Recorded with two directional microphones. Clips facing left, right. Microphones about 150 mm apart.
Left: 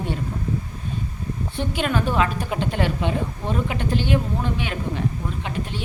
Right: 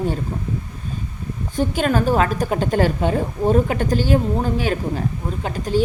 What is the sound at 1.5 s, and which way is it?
A woman's voice, 40° right (ahead or behind).